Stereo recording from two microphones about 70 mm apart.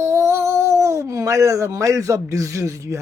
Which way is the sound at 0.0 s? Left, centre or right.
Right.